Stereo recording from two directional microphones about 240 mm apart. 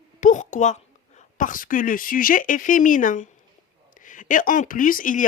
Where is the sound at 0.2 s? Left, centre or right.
Left.